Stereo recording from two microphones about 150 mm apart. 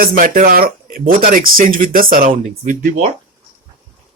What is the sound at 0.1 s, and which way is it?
Speech, 60° right (ahead or behind).